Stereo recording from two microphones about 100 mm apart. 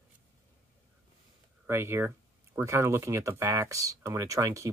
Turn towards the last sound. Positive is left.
turn(degrees=-30)  # may be behind; listen again after turning